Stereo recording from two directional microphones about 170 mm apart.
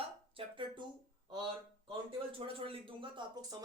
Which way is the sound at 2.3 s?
30° right (ahead or behind).